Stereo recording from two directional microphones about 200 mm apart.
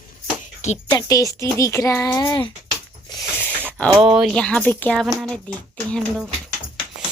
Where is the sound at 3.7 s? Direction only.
5° left (ahead or behind).